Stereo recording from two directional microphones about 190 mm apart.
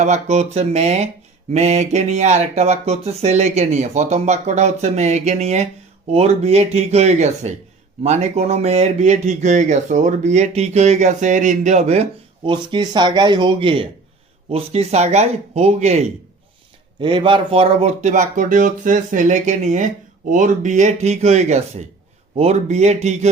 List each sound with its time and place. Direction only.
0.0 s speech: 35° right (ahead or behind)
12.5 s speech: 25° right (ahead or behind)